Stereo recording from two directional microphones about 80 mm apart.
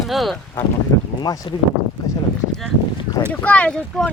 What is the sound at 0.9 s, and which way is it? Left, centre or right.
Boat, left.